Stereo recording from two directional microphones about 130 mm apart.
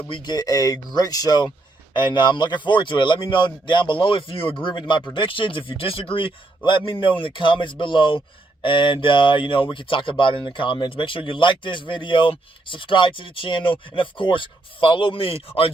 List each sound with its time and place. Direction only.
0.1 s speech: 35° left (ahead or behind)